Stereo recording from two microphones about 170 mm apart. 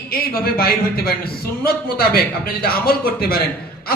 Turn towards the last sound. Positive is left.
turn(degrees=60)  # may be behind; listen again after turning